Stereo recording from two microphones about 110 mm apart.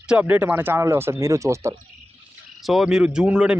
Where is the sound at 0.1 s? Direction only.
15° right (ahead or behind).